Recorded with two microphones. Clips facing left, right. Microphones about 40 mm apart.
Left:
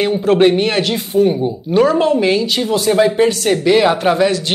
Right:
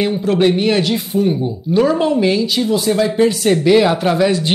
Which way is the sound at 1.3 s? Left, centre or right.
Centre.